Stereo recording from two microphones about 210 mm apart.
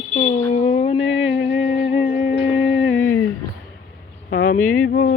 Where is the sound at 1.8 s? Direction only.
25° left (ahead or behind).